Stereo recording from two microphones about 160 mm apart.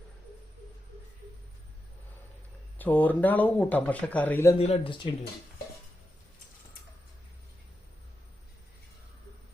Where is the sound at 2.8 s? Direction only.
10° left (ahead or behind).